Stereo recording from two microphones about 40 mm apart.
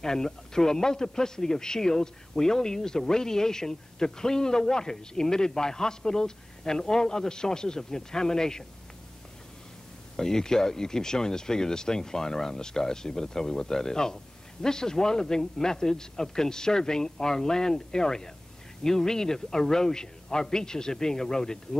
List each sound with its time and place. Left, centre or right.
0.0 s speech: centre
10.1 s speech: centre